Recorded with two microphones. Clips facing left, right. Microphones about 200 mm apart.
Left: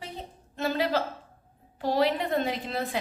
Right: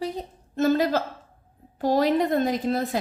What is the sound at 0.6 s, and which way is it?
A woman's voice, 45° right (ahead or behind).